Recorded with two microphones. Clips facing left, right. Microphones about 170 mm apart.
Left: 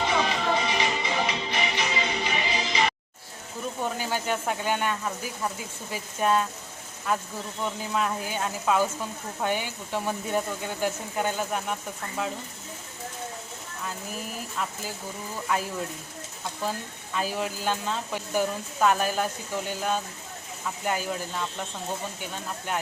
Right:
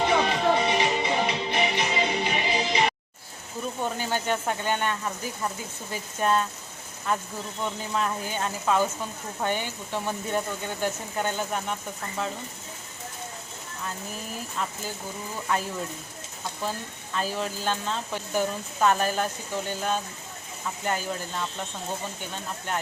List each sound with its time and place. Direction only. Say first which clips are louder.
0.0 s music: right 3 dB; 55° right (ahead or behind)
3.9 s speech: right 1 dB; 5° left (ahead or behind)
15.5 s speech: even; 5° left (ahead or behind)
17.2 s speech: even; 10° left (ahead or behind)